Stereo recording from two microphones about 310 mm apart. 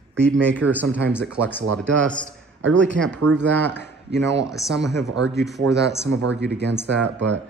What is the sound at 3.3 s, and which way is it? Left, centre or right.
Speech, right.